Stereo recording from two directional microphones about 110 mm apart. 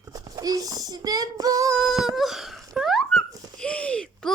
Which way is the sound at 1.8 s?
Centre (ahead or behind).